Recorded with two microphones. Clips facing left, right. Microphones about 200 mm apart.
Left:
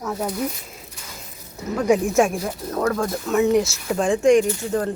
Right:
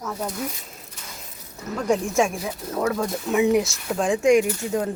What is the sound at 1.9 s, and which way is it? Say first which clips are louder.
Speech: left 3 dB; 5° left (ahead or behind).